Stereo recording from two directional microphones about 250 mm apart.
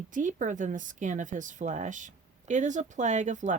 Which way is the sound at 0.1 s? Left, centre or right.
Right.